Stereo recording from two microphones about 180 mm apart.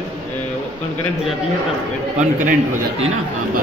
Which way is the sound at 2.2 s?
45° right (ahead or behind).